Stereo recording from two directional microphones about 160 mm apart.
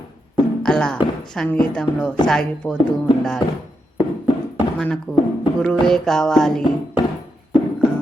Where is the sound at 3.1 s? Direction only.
30° left (ahead or behind).